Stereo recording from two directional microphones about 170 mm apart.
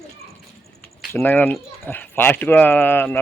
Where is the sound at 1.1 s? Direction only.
10° left (ahead or behind).